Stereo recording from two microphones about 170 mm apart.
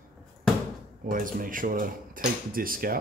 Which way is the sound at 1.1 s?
55° right (ahead or behind).